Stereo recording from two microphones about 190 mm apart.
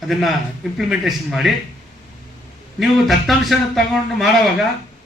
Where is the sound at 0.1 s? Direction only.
Centre (ahead or behind).